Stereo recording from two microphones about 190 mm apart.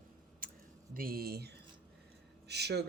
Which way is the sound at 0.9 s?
50° right (ahead or behind).